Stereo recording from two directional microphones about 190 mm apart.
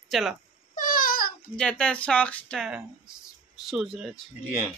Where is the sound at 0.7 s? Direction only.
45° left (ahead or behind).